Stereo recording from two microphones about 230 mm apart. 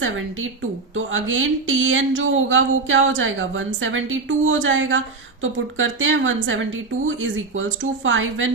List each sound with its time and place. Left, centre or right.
0.9 s speech: right